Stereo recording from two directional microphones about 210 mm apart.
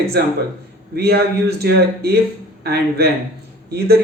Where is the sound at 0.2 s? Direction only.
50° right (ahead or behind).